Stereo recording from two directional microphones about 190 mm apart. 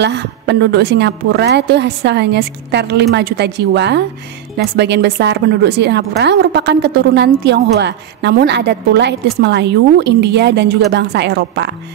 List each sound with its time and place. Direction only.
0.0 s a woman's voice: 65° right (ahead or behind)